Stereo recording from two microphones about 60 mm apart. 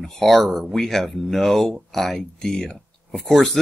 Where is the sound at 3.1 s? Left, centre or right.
Centre.